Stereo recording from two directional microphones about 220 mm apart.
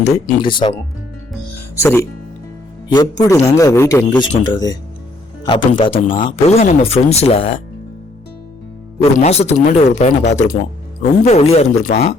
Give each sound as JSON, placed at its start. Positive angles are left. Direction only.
{"t": 0.0, "sound": "speech", "side_deg": 20}
{"t": 9.1, "sound": "speech", "side_deg": 30}